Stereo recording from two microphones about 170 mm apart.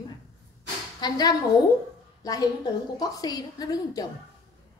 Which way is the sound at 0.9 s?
25° left (ahead or behind).